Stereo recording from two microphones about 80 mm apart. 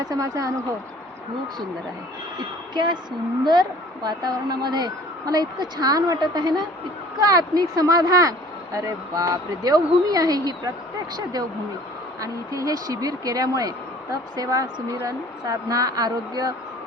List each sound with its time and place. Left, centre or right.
0.0 s speech: right
2.7 s a woman's voice: right
12.2 s speech: right